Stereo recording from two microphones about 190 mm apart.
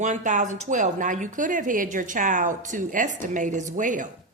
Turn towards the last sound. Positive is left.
turn(degrees=-45)  # may be behind; listen again after turning